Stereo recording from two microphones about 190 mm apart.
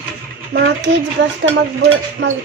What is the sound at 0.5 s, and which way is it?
Speech, 60° right (ahead or behind).